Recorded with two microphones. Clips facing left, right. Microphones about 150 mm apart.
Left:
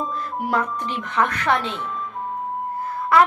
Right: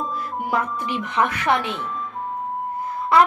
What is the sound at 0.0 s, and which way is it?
A woman's voice, centre (ahead or behind).